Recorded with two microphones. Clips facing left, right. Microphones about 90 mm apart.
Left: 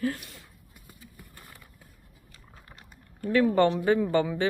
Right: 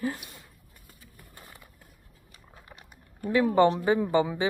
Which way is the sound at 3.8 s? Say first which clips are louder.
Even; 15° right (ahead or behind).